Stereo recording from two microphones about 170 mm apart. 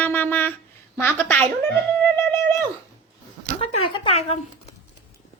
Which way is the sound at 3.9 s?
35° left (ahead or behind).